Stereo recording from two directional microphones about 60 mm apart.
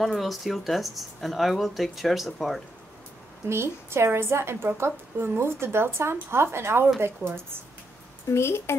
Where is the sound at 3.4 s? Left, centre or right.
Right.